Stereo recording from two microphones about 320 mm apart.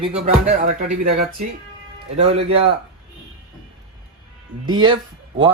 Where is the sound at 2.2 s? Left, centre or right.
Centre.